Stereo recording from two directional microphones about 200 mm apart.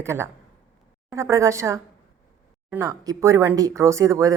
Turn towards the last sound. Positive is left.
turn(degrees=-15)  # may be behind; listen again after turning